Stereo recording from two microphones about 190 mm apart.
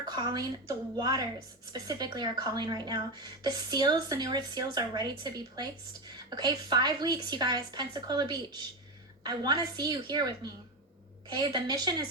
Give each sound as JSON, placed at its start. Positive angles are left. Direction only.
{"t": 0.1, "sound": "a woman's voice", "side_deg": -20}